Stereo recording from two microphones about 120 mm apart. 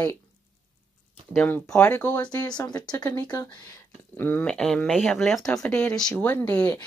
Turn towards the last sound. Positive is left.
turn(degrees=15)  # may be behind; listen again after turning